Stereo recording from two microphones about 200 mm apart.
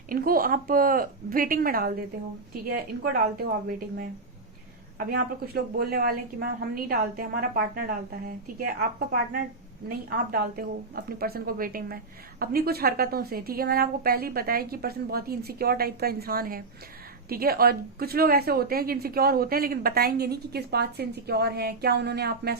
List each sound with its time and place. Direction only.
0.1 s a woman's voice: 45° right (ahead or behind)
10.1 s a woman's voice: 50° right (ahead or behind)